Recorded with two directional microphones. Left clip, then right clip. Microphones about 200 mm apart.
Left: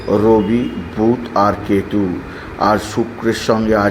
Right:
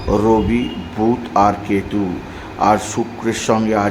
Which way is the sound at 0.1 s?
Centre (ahead or behind).